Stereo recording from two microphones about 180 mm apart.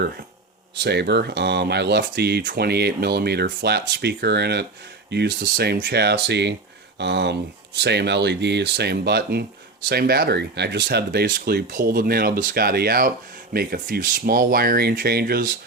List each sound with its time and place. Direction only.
0.8 s speech: 70° right (ahead or behind)